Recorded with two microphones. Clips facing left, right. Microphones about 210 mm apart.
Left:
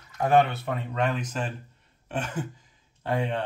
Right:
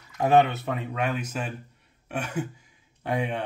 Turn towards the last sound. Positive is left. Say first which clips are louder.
# even
turn(degrees=-15)  # may be behind; listen again after turning